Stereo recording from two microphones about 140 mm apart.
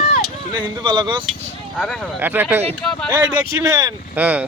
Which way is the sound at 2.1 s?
15° right (ahead or behind).